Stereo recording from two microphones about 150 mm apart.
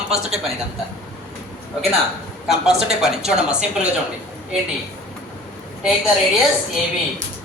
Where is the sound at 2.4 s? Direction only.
5° right (ahead or behind).